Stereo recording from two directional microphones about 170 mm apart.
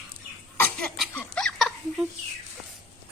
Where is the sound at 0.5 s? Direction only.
10° left (ahead or behind).